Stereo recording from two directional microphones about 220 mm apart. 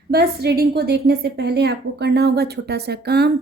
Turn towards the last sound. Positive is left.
turn(degrees=-50)  # may be behind; listen again after turning